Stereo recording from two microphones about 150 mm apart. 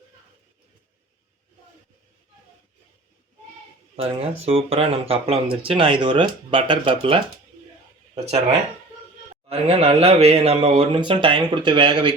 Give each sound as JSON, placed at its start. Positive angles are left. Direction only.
{"t": 3.9, "sound": "speech", "side_deg": -40}
{"t": 9.5, "sound": "speech", "side_deg": -45}